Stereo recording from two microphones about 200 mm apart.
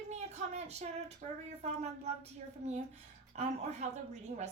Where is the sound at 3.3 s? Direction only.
35° right (ahead or behind).